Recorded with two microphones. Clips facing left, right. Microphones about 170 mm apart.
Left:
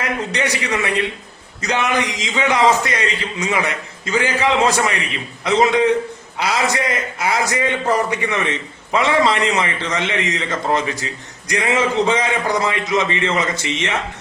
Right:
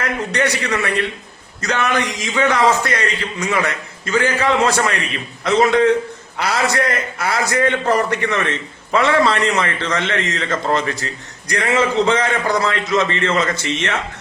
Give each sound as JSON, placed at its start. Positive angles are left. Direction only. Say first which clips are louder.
{"t": 0.0, "sound": "a man's voice", "louder": "right 2 dB", "side_deg": 15}